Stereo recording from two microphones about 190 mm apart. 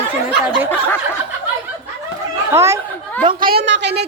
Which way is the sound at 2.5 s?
15° right (ahead or behind).